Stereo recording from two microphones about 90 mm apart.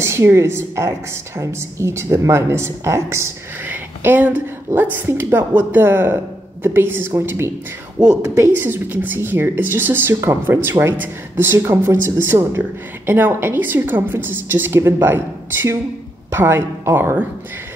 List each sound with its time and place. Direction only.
0.0 s a woman's voice: 30° right (ahead or behind)
3.6 s a sound: 20° right (ahead or behind)
4.7 s a woman's voice: 20° right (ahead or behind)
8.0 s speech: 10° right (ahead or behind)
8.4 s a woman's voice: 25° right (ahead or behind)